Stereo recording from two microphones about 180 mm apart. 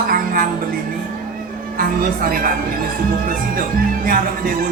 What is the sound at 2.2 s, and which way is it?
Speech, 55° right (ahead or behind).